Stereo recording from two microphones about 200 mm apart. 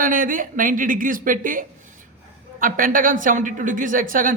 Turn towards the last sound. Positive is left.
turn(degrees=-40)  # may be behind; listen again after turning